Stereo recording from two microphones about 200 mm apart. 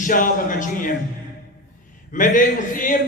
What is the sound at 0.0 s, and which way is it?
Speech, 40° left (ahead or behind).